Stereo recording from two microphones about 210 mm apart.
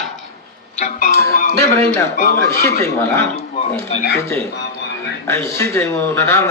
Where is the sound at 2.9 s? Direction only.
15° left (ahead or behind).